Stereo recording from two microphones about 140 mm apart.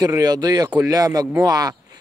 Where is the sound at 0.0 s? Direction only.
25° right (ahead or behind).